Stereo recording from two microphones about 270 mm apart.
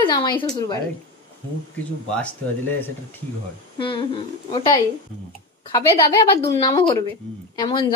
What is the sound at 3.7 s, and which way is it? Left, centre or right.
A woman's voice, centre.